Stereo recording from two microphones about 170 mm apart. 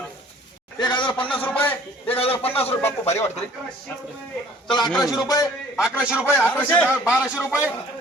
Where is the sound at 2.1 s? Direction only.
35° left (ahead or behind).